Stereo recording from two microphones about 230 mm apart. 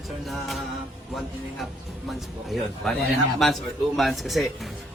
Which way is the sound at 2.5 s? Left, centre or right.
Centre.